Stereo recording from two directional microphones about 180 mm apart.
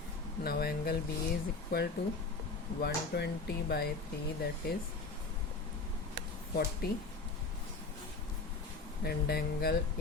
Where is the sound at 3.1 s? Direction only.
65° left (ahead or behind).